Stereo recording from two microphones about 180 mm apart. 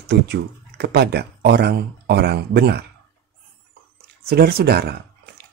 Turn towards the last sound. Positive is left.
turn(degrees=-60)  # may be behind; listen again after turning